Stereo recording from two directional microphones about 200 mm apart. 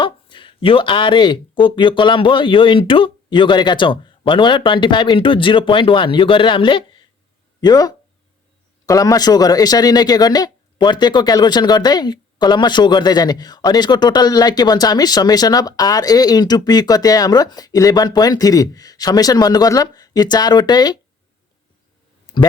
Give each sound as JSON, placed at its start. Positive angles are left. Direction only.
{"t": 0.0, "sound": "speech", "side_deg": 25}